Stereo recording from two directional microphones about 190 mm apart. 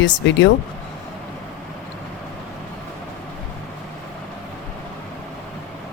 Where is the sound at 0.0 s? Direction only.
80° left.